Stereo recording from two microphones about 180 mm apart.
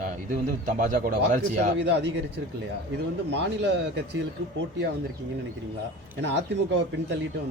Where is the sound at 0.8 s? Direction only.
55° right (ahead or behind).